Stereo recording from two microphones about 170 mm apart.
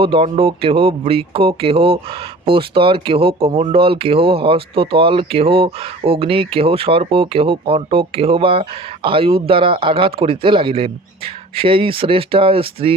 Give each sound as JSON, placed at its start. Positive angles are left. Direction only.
{"t": 0.0, "sound": "speech", "side_deg": -35}